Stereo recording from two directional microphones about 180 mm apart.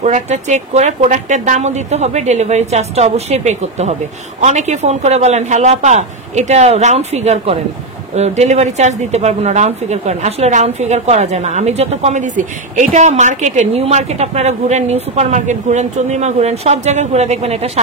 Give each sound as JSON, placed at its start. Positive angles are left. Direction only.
{"t": 0.0, "sound": "a woman's voice", "side_deg": -40}